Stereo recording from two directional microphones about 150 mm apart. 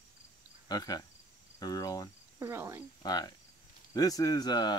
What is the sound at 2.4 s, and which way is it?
Speech, 15° right (ahead or behind).